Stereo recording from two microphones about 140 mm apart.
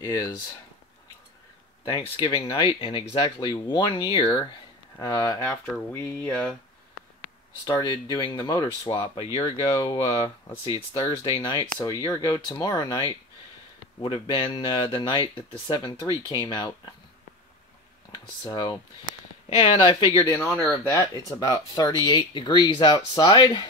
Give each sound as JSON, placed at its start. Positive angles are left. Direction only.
{"t": 0.0, "sound": "speech", "side_deg": 25}
{"t": 1.9, "sound": "speech", "side_deg": 35}
{"t": 4.9, "sound": "speech", "side_deg": 20}
{"t": 5.9, "sound": "speech", "side_deg": 15}
{"t": 7.6, "sound": "speech", "side_deg": 30}
{"t": 9.6, "sound": "speech", "side_deg": 30}
{"t": 14.0, "sound": "speech", "side_deg": 35}
{"t": 18.4, "sound": "speech", "side_deg": 30}
{"t": 19.5, "sound": "speech", "side_deg": 40}
{"t": 20.3, "sound": "speech", "side_deg": 10}
{"t": 21.5, "sound": "speech", "side_deg": 30}